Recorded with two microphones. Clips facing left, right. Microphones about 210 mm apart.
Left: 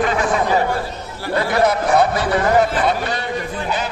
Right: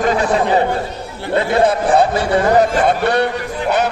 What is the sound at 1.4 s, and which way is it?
A man's voice, 25° right (ahead or behind).